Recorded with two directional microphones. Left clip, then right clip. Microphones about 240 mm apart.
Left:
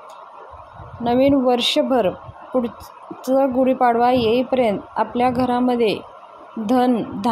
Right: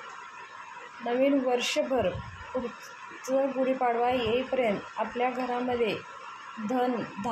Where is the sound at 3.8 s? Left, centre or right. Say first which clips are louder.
Left 11 dB; left.